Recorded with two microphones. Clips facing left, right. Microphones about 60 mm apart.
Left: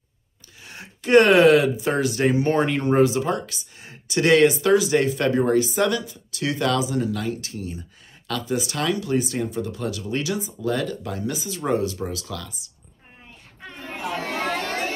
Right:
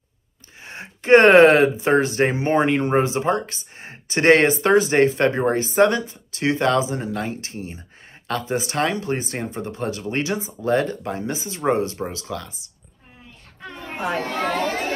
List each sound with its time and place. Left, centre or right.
0.6 s speech: right
13.8 s chatter: right
14.2 s chatter: centre